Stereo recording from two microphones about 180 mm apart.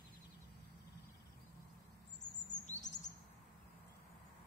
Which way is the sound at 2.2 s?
40° left (ahead or behind).